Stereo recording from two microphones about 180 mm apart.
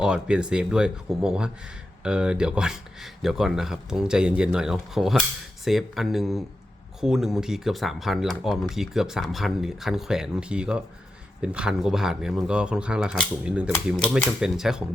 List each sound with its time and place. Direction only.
0.0 s speech: 5° right (ahead or behind)